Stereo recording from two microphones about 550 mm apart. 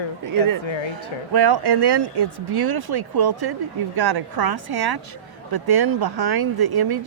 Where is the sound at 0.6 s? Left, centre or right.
Left.